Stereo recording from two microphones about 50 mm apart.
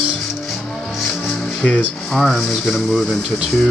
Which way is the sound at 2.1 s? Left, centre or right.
Centre.